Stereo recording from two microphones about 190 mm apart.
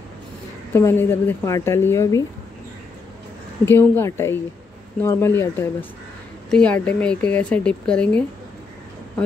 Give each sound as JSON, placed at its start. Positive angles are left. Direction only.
{"t": 0.7, "sound": "speech", "side_deg": 10}
{"t": 3.6, "sound": "speech", "side_deg": 10}